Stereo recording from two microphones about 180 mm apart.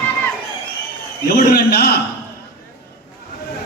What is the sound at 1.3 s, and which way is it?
Speech, 55° left (ahead or behind).